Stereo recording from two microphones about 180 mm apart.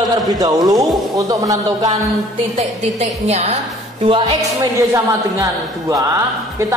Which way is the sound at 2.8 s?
35° right (ahead or behind).